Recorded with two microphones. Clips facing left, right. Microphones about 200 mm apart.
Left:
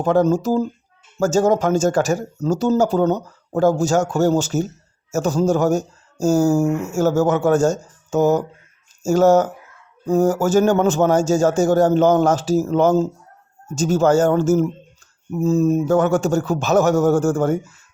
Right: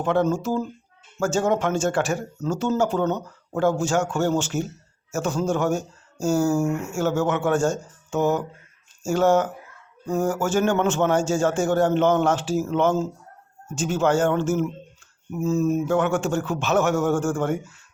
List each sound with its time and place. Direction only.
0.0 s speech: 40° left (ahead or behind)